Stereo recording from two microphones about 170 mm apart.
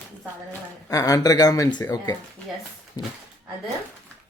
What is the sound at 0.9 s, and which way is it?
Speech, 20° left (ahead or behind).